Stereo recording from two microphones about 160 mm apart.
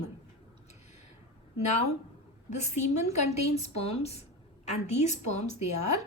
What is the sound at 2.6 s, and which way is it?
A woman's voice, 45° left (ahead or behind).